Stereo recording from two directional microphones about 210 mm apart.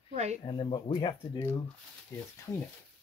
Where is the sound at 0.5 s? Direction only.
25° left (ahead or behind).